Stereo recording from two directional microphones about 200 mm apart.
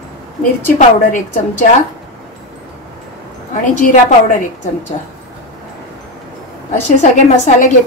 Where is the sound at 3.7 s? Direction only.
40° left (ahead or behind).